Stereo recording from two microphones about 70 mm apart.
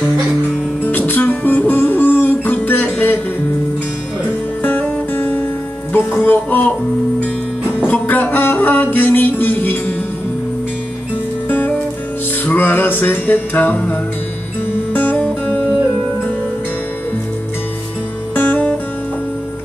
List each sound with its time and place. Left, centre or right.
0.8 s music: left
4.6 s music: left
7.9 s music: left
11.4 s music: left
18.3 s music: left